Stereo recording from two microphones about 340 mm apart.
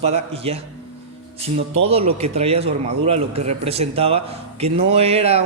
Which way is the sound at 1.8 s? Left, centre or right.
Centre.